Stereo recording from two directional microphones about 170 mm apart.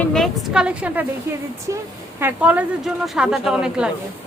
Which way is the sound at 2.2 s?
10° right (ahead or behind).